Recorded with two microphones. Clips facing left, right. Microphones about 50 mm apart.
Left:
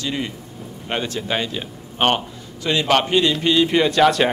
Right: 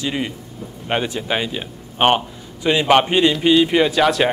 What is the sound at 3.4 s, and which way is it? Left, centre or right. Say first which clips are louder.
Speech: right 2 dB; centre.